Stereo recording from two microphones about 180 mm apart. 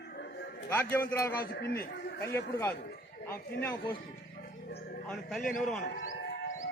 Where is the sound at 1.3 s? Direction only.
60° left (ahead or behind).